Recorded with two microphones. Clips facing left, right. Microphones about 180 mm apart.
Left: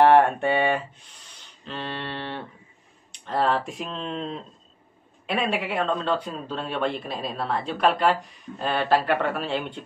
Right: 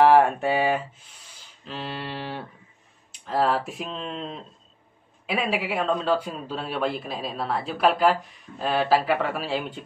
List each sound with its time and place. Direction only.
0.0 s speech: centre (ahead or behind)